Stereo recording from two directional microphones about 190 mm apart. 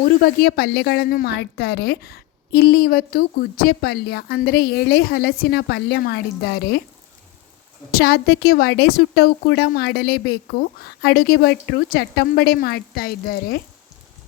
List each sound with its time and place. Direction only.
0.0 s a woman's voice: 55° left (ahead or behind)
7.9 s a woman's voice: 55° left (ahead or behind)